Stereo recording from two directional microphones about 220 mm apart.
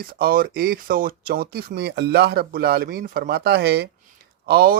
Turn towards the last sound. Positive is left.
turn(degrees=-45)  # may be behind; listen again after turning